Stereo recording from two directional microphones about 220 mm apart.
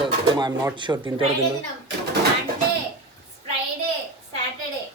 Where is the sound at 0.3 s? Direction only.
20° right (ahead or behind).